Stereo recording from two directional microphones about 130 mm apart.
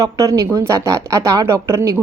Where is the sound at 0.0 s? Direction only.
25° right (ahead or behind).